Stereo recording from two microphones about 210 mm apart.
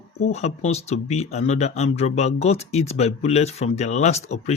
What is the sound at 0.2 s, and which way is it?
Speech, 30° left (ahead or behind).